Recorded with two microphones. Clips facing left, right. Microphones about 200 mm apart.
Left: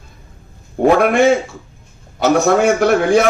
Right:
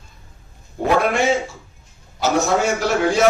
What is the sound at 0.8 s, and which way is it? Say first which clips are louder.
Speech: left 8 dB; 55° left (ahead or behind).